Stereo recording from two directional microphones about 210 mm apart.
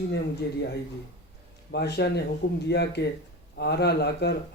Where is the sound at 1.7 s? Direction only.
50° left (ahead or behind).